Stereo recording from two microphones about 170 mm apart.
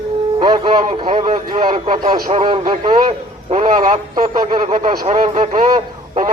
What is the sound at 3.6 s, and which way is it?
Speech, 50° right (ahead or behind).